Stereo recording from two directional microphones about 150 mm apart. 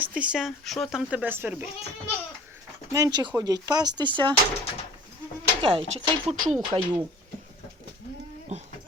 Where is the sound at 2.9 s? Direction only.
25° right (ahead or behind).